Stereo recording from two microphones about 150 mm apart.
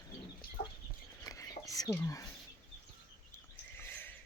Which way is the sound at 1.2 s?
20° left (ahead or behind).